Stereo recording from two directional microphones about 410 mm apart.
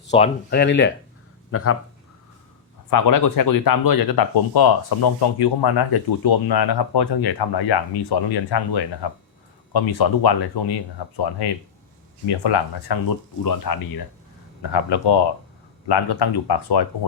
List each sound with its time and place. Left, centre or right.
0.1 s speech: centre
2.9 s speech: left
13.4 s speech: left
14.6 s speech: left